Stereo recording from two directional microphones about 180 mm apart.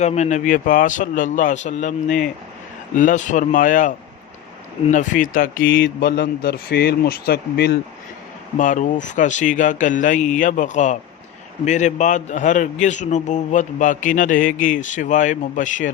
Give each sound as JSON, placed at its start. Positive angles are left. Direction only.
{"t": 0.0, "sound": "a man's voice", "side_deg": 40}
{"t": 5.6, "sound": "mantra", "side_deg": 90}
{"t": 6.0, "sound": "speech", "side_deg": 55}
{"t": 8.5, "sound": "a man's voice", "side_deg": 45}